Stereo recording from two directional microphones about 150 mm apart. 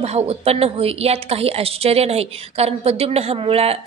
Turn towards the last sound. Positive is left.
turn(degrees=-40)  # may be behind; listen again after turning